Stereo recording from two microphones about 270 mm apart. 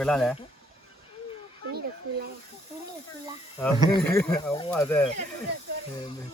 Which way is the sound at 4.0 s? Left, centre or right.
Centre.